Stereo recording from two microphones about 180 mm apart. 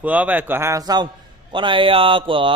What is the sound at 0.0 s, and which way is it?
A man's voice, 10° right (ahead or behind).